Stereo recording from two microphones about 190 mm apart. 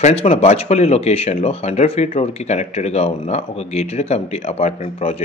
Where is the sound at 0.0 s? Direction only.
35° left (ahead or behind).